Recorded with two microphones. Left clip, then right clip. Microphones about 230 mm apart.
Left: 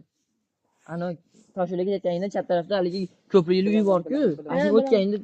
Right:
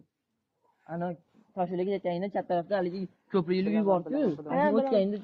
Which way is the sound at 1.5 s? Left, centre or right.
Left.